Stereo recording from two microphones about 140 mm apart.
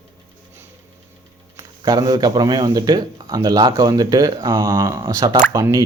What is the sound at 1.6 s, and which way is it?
Speech, 30° right (ahead or behind).